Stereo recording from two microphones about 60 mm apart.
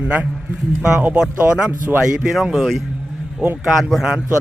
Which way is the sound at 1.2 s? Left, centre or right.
Centre.